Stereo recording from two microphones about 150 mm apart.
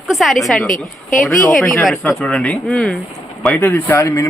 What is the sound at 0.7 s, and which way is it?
Speech, 60° left (ahead or behind).